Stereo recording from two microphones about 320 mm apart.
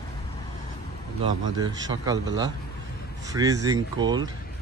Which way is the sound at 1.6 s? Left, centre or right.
Centre.